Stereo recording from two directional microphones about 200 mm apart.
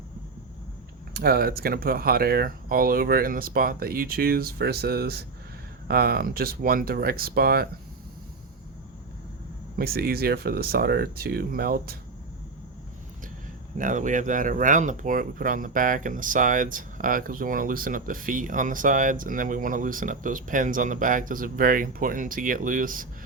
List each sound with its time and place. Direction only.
1.1 s speech: 50° right (ahead or behind)
9.7 s speech: 50° right (ahead or behind)
13.7 s speech: 40° right (ahead or behind)